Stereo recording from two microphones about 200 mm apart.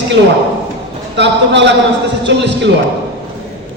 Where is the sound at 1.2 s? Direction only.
60° right (ahead or behind).